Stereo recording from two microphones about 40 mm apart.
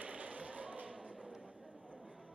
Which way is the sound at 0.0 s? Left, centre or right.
Right.